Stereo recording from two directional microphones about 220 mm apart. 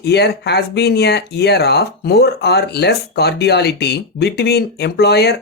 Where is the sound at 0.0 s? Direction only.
50° left (ahead or behind).